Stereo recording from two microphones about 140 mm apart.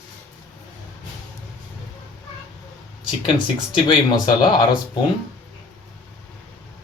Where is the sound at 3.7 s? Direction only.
35° left (ahead or behind).